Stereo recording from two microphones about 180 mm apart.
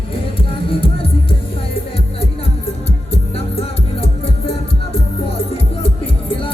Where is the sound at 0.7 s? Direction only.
30° left (ahead or behind).